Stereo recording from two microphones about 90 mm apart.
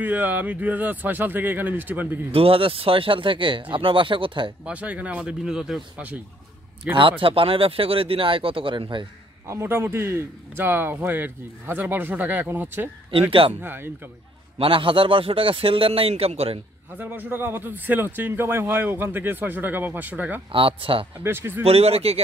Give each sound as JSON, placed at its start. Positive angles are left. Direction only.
{"t": 0.0, "sound": "a man's voice", "side_deg": -20}
{"t": 2.3, "sound": "speech", "side_deg": -90}
{"t": 4.6, "sound": "speech", "side_deg": -15}
{"t": 7.0, "sound": "speech", "side_deg": -75}
{"t": 9.5, "sound": "a man's voice", "side_deg": -30}
{"t": 14.6, "sound": "speech", "side_deg": -75}
{"t": 17.0, "sound": "a man's voice", "side_deg": -20}
{"t": 20.5, "sound": "speech", "side_deg": -85}
{"t": 21.2, "sound": "a man's voice", "side_deg": -25}
{"t": 22.0, "sound": "speech", "side_deg": -90}